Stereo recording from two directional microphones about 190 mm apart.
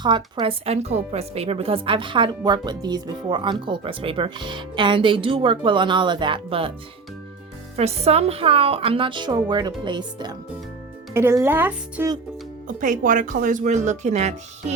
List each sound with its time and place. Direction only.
0.0 s speech: 25° right (ahead or behind)
7.8 s speech: 35° right (ahead or behind); by 12.1 s 10° right (ahead or behind)
12.6 s speech: 45° right (ahead or behind)